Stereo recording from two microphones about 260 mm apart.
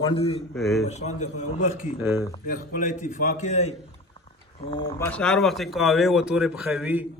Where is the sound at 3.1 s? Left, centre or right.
Left.